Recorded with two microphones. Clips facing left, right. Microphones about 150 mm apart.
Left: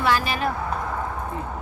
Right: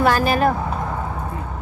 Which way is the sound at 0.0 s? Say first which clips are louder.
Right 6 dB; 45° right (ahead or behind).